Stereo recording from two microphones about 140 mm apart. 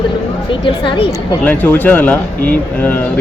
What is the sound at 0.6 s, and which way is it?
Speech, 40° left (ahead or behind).